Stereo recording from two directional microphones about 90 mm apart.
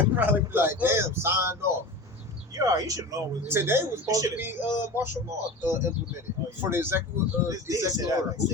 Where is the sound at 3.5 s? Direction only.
30° right (ahead or behind).